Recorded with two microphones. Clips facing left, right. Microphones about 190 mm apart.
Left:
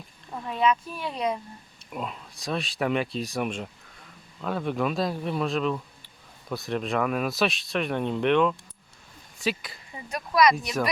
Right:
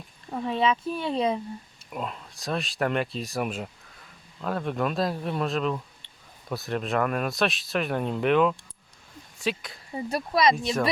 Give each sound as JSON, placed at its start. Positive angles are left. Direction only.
{"t": 0.4, "sound": "speech", "side_deg": -30}
{"t": 1.9, "sound": "speech", "side_deg": 0}
{"t": 9.9, "sound": "speech", "side_deg": -35}